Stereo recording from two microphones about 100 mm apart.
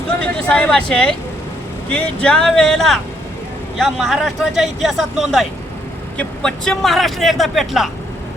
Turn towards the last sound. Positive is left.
turn(degrees=0)  # may be behind; listen again after turning